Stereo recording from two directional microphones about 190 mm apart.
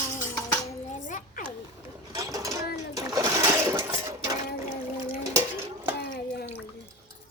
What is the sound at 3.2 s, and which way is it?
Sewing machine, 15° right (ahead or behind).